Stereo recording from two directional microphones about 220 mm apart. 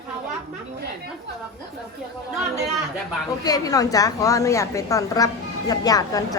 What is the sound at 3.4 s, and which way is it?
A woman's voice, 15° left (ahead or behind).